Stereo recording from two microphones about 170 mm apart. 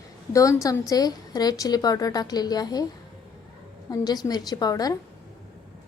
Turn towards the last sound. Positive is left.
turn(degrees=20)  # may be behind; listen again after turning